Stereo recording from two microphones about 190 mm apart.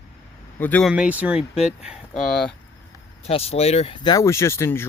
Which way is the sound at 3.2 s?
30° left (ahead or behind).